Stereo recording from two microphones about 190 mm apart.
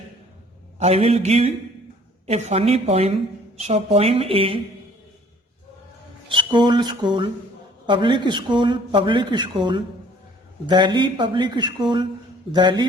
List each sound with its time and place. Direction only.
0.8 s speech: 35° right (ahead or behind)
6.2 s speech: 25° right (ahead or behind)